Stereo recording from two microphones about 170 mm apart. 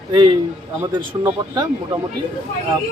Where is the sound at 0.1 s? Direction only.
30° right (ahead or behind).